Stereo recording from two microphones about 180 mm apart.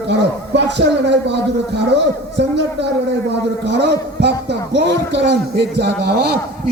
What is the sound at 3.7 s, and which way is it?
A man's voice, 70° right (ahead or behind).